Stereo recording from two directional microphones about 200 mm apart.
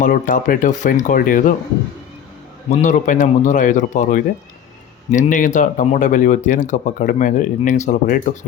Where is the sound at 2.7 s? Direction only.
35° left (ahead or behind).